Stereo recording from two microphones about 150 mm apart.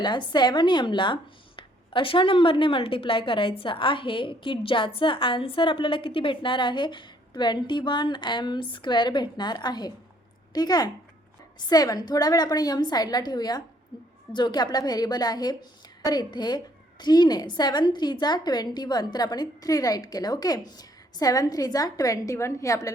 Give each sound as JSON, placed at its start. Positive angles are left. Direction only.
{"t": 0.0, "sound": "a woman's voice", "side_deg": 30}